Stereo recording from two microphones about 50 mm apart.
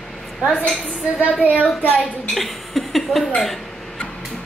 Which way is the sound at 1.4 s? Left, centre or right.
Right.